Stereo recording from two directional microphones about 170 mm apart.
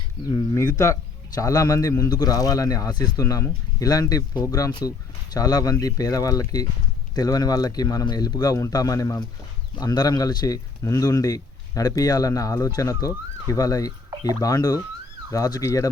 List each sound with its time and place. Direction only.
0.3 s speech: 20° left (ahead or behind)